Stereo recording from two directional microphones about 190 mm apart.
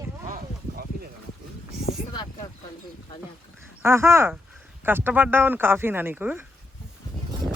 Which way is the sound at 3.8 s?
15° right (ahead or behind).